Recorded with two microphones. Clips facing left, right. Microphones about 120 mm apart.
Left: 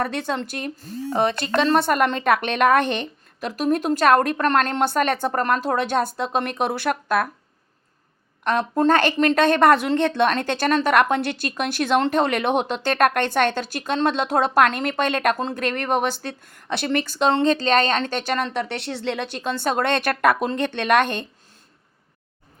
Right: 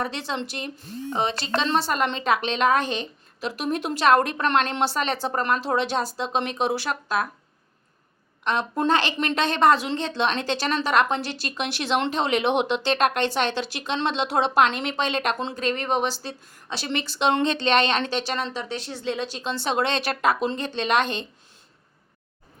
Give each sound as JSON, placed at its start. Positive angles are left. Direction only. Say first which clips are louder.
{"t": 0.0, "sound": "a woman's voice", "louder": "left 4 dB", "side_deg": 50}
{"t": 3.5, "sound": "a woman's voice", "louder": "left 7 dB", "side_deg": 45}
{"t": 8.4, "sound": "a woman's voice", "louder": "left 4 dB", "side_deg": 45}